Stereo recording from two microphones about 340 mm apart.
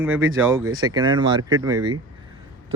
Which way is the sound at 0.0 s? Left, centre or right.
Centre.